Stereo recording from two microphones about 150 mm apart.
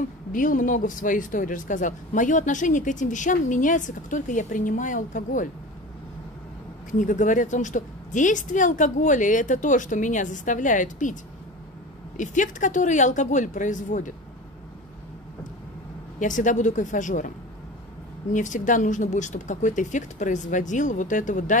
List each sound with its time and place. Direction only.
0.3 s speech: 65° left (ahead or behind)
6.9 s speech: 55° left (ahead or behind)
12.2 s speech: 55° left (ahead or behind)
16.2 s speech: 55° left (ahead or behind)
18.3 s speech: 55° left (ahead or behind)